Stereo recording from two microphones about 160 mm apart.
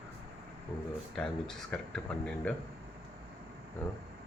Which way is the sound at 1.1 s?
5° left (ahead or behind).